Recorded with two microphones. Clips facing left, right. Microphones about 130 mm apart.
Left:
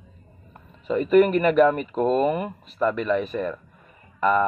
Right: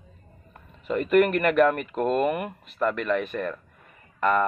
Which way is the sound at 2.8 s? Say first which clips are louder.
Left 2 dB; 10° left (ahead or behind).